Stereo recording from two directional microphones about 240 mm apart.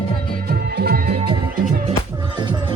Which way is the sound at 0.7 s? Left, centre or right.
Right.